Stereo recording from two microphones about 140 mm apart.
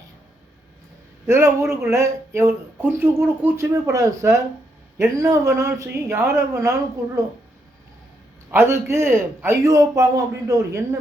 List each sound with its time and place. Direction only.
1.3 s speech: 20° right (ahead or behind)
8.4 s speech: 20° right (ahead or behind)